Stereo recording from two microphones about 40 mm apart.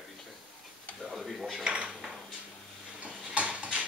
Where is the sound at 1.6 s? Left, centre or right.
Right.